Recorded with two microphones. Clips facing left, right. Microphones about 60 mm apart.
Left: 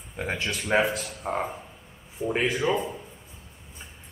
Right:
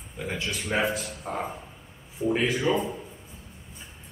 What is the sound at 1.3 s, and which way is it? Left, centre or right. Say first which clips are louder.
Speech: left 4 dB; left.